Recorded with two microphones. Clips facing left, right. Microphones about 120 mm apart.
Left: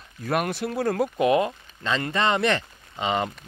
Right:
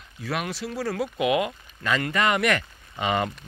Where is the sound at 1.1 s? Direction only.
35° left (ahead or behind).